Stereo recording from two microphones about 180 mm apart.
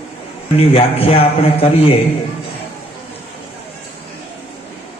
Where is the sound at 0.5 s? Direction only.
30° left (ahead or behind).